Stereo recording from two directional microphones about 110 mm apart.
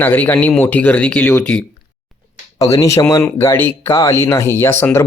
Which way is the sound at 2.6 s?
30° left (ahead or behind).